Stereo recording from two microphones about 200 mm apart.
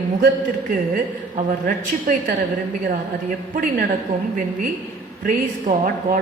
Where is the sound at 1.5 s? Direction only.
45° right (ahead or behind).